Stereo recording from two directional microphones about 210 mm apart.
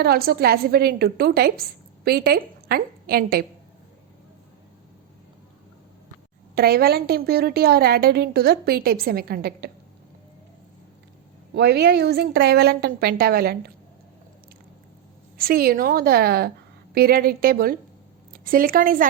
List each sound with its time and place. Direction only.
0.0 s a woman's voice: 45° right (ahead or behind)
6.6 s a woman's voice: 50° right (ahead or behind)
11.5 s a woman's voice: 50° right (ahead or behind)
15.4 s a woman's voice: 45° right (ahead or behind)